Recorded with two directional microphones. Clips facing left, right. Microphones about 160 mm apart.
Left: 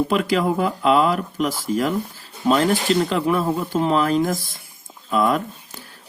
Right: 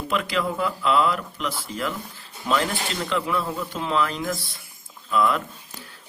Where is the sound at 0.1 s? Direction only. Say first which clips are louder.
Left 6 dB; 40° left (ahead or behind).